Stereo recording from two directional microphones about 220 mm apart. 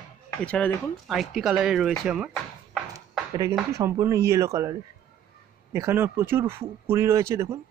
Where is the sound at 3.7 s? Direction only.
15° right (ahead or behind).